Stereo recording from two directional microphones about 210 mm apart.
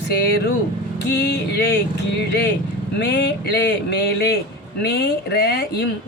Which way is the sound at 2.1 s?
55° left (ahead or behind).